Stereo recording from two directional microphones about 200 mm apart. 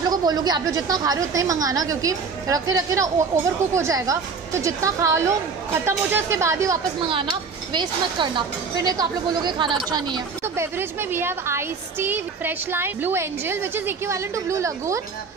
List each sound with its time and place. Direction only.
0.1 s a woman's voice: 20° right (ahead or behind)